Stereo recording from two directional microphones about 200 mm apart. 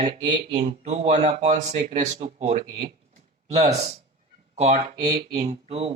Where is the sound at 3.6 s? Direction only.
35° right (ahead or behind).